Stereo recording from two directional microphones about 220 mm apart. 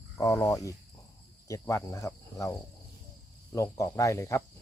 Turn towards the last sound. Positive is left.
turn(degrees=15)  # may be behind; listen again after turning